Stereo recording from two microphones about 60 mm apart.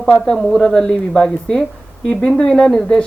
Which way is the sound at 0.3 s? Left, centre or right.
Centre.